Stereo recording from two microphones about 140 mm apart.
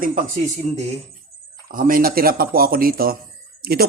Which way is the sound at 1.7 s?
80° right.